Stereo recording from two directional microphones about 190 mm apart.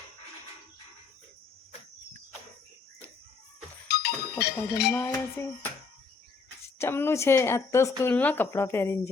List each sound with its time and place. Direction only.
3.8 s music: 55° left (ahead or behind)
4.9 s speech: 10° left (ahead or behind)
6.7 s speech: 10° left (ahead or behind)